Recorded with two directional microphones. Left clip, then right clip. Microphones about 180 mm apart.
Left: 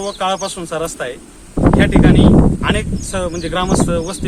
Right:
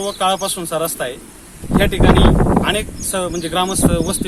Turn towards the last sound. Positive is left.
turn(degrees=0)  # may be behind; listen again after turning